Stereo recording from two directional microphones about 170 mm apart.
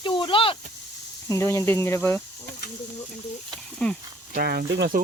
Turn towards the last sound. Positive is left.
turn(degrees=-70)  # may be behind; listen again after turning